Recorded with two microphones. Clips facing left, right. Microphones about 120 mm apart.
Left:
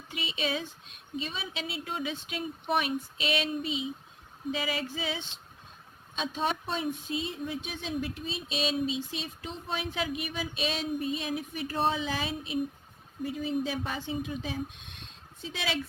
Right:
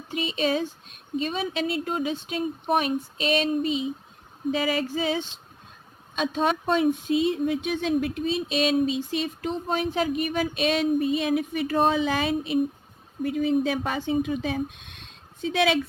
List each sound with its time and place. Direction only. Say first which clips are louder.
0.1 s speech: right 8 dB; 45° right (ahead or behind)
6.1 s speech: right 7 dB; 65° right (ahead or behind)